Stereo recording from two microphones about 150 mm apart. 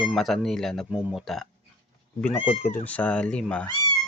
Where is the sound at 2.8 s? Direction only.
10° left (ahead or behind).